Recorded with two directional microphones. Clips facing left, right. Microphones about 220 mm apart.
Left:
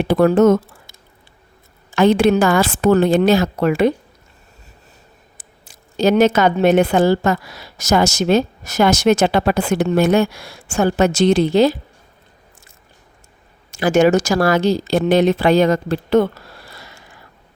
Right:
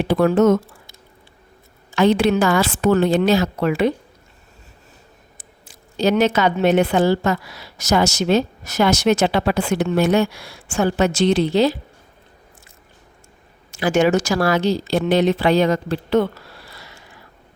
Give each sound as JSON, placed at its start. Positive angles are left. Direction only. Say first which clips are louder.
{"t": 0.1, "sound": "a woman's voice", "louder": "left 3 dB", "side_deg": 45}
{"t": 2.0, "sound": "a woman's voice", "louder": "left 3 dB", "side_deg": 50}
{"t": 6.0, "sound": "a woman's voice", "louder": "left 3 dB", "side_deg": 45}
{"t": 13.7, "sound": "a woman's voice", "louder": "left 3 dB", "side_deg": 40}